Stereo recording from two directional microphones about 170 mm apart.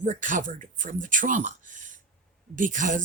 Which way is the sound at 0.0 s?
45° right (ahead or behind).